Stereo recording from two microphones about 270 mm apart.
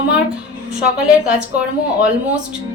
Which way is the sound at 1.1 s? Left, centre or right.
Centre.